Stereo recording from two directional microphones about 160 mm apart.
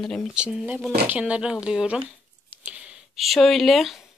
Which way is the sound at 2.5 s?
10° right (ahead or behind).